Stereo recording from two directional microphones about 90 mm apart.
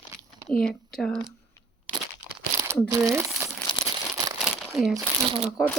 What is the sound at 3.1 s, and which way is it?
Speech, 30° right (ahead or behind).